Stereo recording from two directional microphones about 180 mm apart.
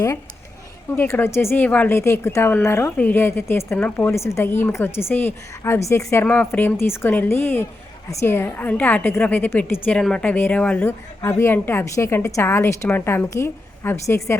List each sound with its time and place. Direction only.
0.9 s a woman's voice: 15° left (ahead or behind)